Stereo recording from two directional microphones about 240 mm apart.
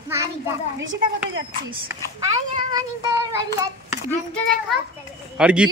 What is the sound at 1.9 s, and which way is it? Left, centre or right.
Speech, centre.